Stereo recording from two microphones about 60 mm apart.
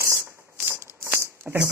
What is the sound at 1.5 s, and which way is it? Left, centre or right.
Speech, centre.